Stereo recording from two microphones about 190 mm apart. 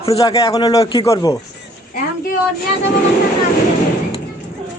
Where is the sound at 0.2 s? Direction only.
20° left (ahead or behind).